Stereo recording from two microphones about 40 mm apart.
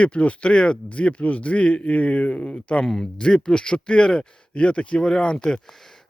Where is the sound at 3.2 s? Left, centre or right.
Left.